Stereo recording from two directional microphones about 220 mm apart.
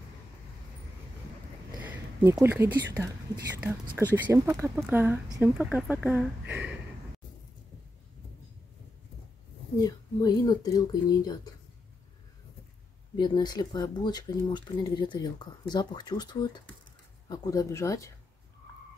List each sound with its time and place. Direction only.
1.8 s speech: 10° right (ahead or behind)
4.1 s speech: 10° right (ahead or behind)
9.8 s speech: 15° left (ahead or behind)
13.1 s speech: 20° left (ahead or behind)